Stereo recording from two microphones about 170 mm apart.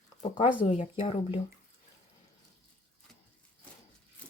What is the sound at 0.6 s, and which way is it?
Speech, 35° left (ahead or behind).